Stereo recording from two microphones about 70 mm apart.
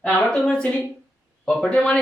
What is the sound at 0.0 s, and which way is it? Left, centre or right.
A woman's voice, centre.